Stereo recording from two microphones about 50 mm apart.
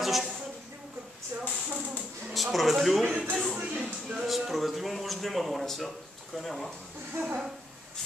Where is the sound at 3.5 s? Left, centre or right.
Right.